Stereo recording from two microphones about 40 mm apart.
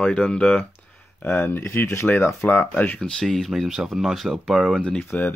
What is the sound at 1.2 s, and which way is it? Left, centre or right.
Speech, left.